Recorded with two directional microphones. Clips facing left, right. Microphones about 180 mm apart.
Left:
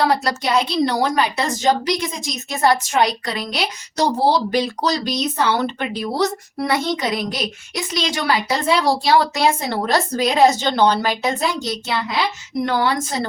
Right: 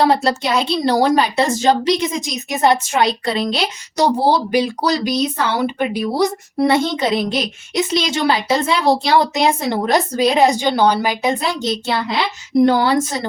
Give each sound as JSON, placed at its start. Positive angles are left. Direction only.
{"t": 0.0, "sound": "a woman's voice", "side_deg": -25}
{"t": 3.9, "sound": "speech", "side_deg": -15}
{"t": 6.6, "sound": "a woman's voice", "side_deg": -25}